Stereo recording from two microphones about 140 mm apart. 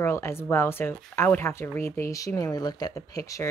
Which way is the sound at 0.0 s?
20° left (ahead or behind).